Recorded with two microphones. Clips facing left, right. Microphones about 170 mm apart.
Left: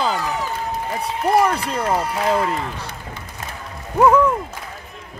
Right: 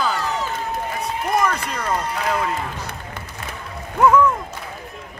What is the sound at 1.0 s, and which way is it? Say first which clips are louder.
Speech: left 4 dB; 30° left (ahead or behind).